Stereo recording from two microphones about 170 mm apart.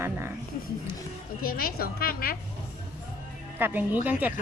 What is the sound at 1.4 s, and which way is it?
Speech, 60° left (ahead or behind).